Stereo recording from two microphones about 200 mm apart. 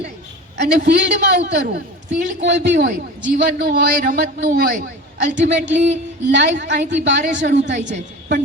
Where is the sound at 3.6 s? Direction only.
45° right (ahead or behind).